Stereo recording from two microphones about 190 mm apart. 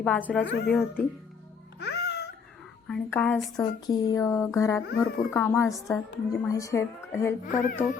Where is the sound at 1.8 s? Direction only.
60° left (ahead or behind).